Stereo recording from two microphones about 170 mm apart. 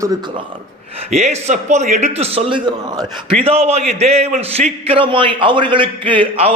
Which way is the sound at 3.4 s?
35° right (ahead or behind).